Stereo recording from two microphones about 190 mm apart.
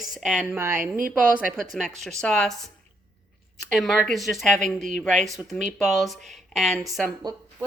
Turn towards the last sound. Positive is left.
turn(degrees=0)  # may be behind; listen again after turning